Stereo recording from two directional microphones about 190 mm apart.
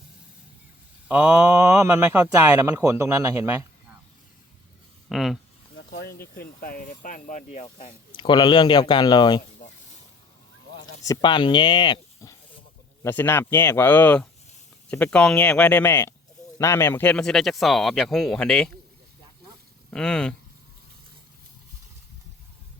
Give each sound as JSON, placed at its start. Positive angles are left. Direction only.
{"t": 1.0, "sound": "speech", "side_deg": -5}
{"t": 5.0, "sound": "speech", "side_deg": 0}
{"t": 5.7, "sound": "speech", "side_deg": 55}
{"t": 9.6, "sound": "a sound", "side_deg": 50}
{"t": 11.0, "sound": "speech", "side_deg": 20}
{"t": 19.9, "sound": "speech", "side_deg": 5}